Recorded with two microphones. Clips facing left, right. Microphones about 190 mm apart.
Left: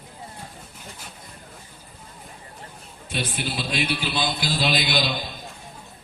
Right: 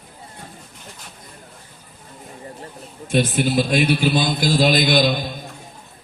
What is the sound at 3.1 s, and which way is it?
A man's voice, 45° right (ahead or behind).